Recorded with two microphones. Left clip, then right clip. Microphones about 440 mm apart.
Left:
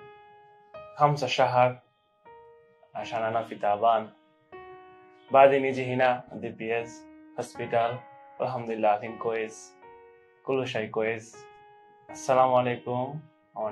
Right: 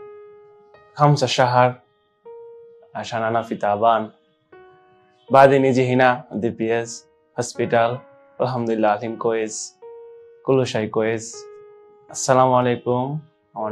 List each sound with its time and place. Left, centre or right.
0.9 s speech: right
2.9 s speech: right
5.3 s speech: right